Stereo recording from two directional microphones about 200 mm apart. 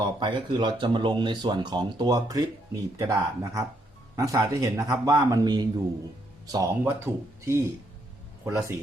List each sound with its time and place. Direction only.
0.0 s a man's voice: 25° right (ahead or behind)